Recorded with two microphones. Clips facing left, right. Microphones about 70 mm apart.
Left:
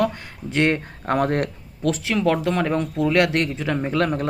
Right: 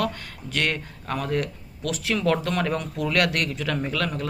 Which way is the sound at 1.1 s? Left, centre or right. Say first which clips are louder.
Left 6 dB; left.